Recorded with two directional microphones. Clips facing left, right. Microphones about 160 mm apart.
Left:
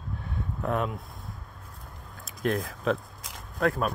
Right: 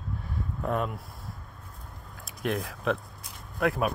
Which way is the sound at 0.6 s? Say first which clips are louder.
Left 1 dB; centre (ahead or behind).